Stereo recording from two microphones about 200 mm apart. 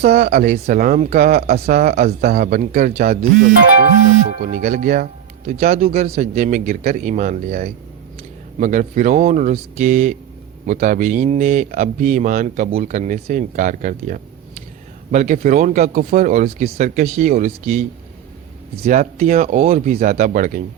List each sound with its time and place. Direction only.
0.0 s speech: 50° right (ahead or behind)
0.3 s speech: 40° right (ahead or behind)
18.9 s speech: 35° right (ahead or behind)
19.9 s speech: 45° right (ahead or behind)